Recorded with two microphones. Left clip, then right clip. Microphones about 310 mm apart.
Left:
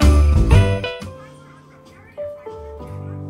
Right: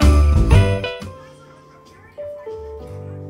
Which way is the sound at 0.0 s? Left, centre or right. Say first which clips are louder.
Even; centre.